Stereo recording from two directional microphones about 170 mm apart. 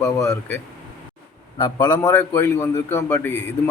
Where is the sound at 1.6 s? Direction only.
25° left (ahead or behind).